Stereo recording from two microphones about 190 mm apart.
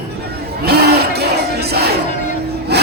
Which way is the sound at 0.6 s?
60° right (ahead or behind).